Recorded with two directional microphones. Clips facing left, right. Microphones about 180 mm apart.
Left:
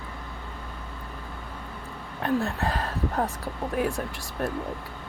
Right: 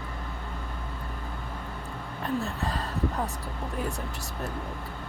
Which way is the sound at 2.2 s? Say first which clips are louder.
Left 5 dB; 60° left (ahead or behind).